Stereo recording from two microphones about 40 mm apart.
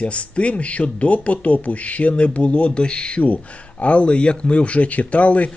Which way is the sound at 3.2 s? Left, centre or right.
Left.